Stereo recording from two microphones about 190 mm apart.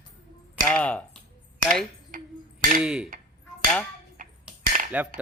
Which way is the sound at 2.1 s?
45° right (ahead or behind).